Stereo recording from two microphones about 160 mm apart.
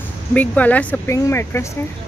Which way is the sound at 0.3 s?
10° left (ahead or behind).